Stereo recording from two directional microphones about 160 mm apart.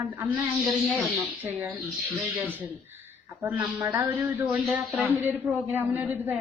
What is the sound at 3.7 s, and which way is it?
Speech, 20° right (ahead or behind).